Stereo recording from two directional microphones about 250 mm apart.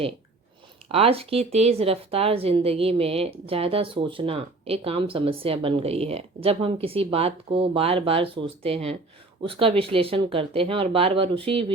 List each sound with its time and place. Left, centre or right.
0.9 s speech: right